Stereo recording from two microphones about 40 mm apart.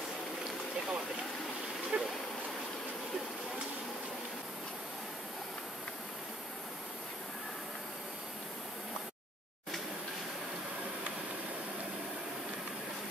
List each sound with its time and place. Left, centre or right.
1.9 s insect: right